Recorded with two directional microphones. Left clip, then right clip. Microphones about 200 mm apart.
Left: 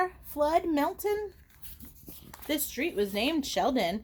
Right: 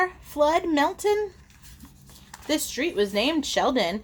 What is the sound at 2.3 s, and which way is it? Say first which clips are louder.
A woman's voice: right 6 dB; 35° left (ahead or behind).